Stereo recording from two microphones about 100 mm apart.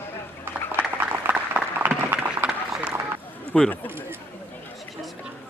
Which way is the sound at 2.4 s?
10° right (ahead or behind).